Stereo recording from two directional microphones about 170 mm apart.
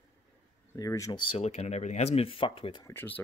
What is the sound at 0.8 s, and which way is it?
Speech, 20° left (ahead or behind).